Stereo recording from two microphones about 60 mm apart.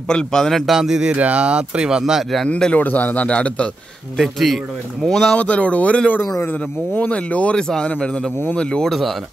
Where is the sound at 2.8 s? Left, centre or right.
Left.